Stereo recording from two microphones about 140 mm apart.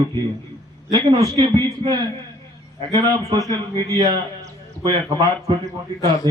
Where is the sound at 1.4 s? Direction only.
30° right (ahead or behind).